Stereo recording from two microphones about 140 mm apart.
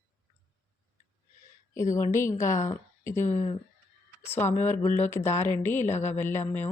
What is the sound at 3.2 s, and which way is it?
Speech, 55° left (ahead or behind).